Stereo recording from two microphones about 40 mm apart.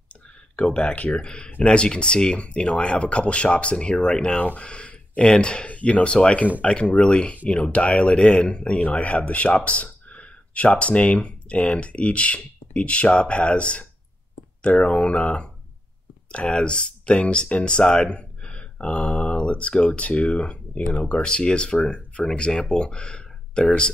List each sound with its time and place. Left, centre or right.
0.6 s speech: left
4.6 s a sound: left
5.3 s speech: left
5.7 s speech: left
8.7 s speech: left